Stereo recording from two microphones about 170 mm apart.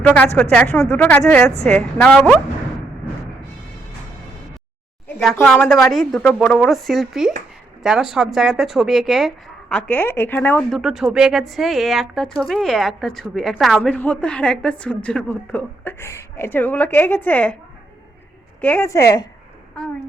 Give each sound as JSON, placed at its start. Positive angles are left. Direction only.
{"t": 0.0, "sound": "speech", "side_deg": 10}
{"t": 5.2, "sound": "speech", "side_deg": 0}
{"t": 10.8, "sound": "speech", "side_deg": 0}
{"t": 18.6, "sound": "a woman's voice", "side_deg": 10}